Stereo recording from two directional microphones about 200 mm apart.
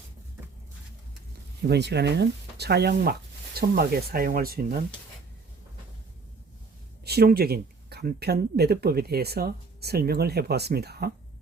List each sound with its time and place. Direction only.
1.6 s speech: 55° right (ahead or behind)
7.0 s speech: 50° right (ahead or behind)